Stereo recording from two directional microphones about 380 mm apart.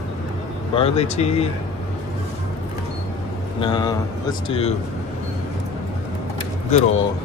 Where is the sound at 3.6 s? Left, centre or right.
Centre.